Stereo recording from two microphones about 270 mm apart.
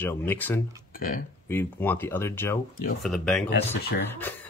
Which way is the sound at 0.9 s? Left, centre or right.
Left.